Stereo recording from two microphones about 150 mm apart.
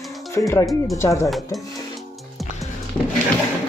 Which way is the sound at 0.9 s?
20° left (ahead or behind).